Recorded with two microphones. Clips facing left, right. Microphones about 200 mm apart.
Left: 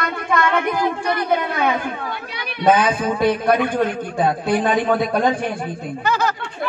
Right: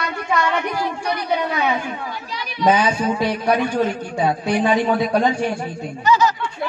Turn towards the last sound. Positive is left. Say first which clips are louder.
# right 3 dB
turn(degrees=55)  # may be behind; listen again after turning